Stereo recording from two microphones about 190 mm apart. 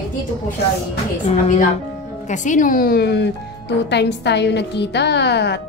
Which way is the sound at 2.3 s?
40° left (ahead or behind).